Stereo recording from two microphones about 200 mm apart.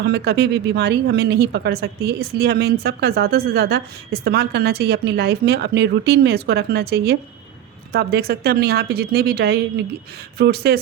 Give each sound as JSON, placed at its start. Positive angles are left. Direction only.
{"t": 0.0, "sound": "speech", "side_deg": -55}